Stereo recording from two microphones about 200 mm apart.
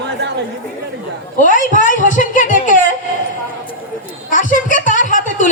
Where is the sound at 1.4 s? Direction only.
40° left (ahead or behind).